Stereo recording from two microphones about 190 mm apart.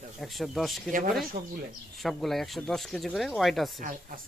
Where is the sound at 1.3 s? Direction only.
55° right (ahead or behind).